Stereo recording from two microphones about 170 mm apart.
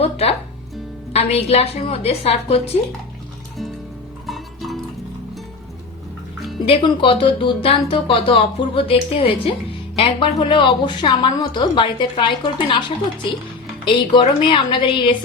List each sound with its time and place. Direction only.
0.0 s speech: 35° left (ahead or behind)
4.3 s music: centre (ahead or behind)
6.7 s a woman's voice: 30° left (ahead or behind)
13.8 s a woman's voice: 30° left (ahead or behind)